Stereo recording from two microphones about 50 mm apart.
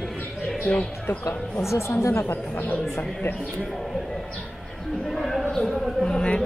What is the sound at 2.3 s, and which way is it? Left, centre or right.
Speech, left.